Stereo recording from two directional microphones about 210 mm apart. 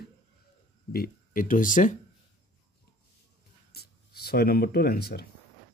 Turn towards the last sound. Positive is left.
turn(degrees=50)  # may be behind; listen again after turning